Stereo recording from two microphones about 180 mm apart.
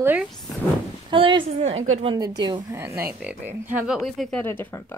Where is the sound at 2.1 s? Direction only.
20° right (ahead or behind).